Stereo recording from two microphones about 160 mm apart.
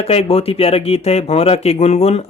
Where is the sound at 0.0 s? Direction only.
40° left (ahead or behind).